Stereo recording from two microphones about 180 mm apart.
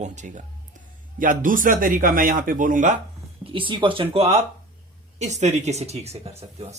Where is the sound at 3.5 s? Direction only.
30° right (ahead or behind).